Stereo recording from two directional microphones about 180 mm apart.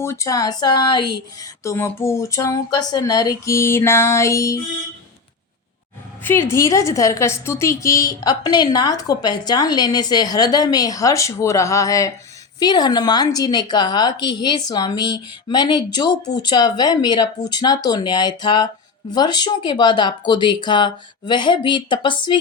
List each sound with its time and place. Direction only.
0.0 s speech: 15° left (ahead or behind)
6.2 s a woman's voice: 10° left (ahead or behind)